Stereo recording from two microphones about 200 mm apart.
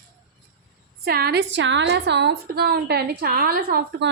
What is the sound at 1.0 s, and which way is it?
A woman's voice, 50° right (ahead or behind).